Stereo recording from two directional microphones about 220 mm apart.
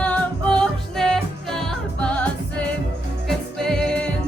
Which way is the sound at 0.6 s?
Centre (ahead or behind).